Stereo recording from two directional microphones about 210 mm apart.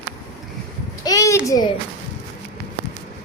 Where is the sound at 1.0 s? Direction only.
15° left (ahead or behind).